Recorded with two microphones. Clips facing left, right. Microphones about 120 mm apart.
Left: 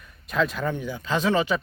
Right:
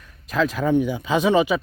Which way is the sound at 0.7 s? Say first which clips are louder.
Right 7 dB; 15° right (ahead or behind).